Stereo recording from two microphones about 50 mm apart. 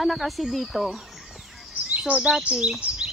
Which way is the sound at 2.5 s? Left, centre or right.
Centre.